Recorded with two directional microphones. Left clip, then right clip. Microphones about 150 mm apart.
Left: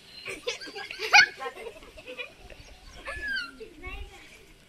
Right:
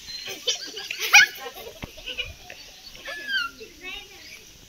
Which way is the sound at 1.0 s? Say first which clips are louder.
Right 3 dB; 45° left (ahead or behind).